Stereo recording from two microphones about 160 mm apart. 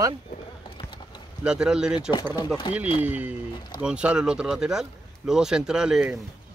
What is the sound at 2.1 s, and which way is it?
Speech, 30° left (ahead or behind).